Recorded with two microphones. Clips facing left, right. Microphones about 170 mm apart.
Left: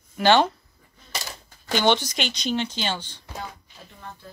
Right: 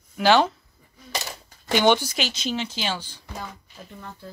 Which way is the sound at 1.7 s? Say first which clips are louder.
Right 2 dB; 10° right (ahead or behind).